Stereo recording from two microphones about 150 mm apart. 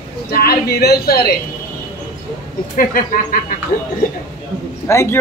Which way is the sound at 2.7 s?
70° left (ahead or behind).